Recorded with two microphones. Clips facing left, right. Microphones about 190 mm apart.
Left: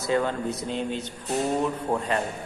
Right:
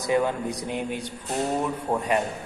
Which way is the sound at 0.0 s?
15° right (ahead or behind).